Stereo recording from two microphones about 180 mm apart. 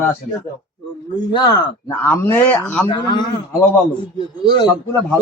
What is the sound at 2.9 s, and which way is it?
Speech, 25° left (ahead or behind).